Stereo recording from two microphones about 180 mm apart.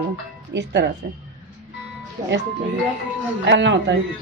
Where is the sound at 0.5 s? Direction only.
75° right (ahead or behind).